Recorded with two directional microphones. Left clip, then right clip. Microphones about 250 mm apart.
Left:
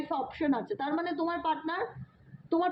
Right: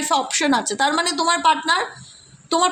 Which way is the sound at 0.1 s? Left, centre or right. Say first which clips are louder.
Right 13 dB; right.